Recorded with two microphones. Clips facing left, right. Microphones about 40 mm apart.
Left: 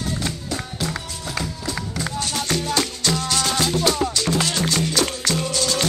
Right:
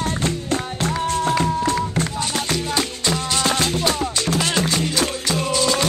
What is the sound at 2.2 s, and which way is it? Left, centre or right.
Music, right.